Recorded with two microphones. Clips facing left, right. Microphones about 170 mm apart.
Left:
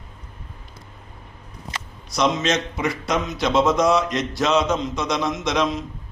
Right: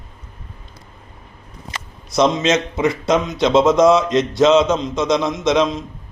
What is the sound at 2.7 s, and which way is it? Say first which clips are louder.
Speech: right 6 dB; 25° right (ahead or behind).